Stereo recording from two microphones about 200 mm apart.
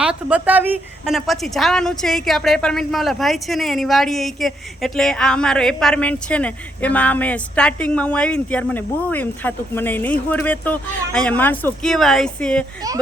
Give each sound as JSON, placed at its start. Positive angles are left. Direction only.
{"t": 0.0, "sound": "a woman's voice", "side_deg": -5}